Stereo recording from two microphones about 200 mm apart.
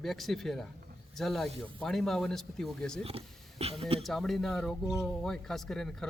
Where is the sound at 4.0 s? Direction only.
Centre (ahead or behind).